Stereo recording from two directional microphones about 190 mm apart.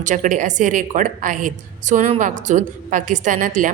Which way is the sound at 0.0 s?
40° right (ahead or behind).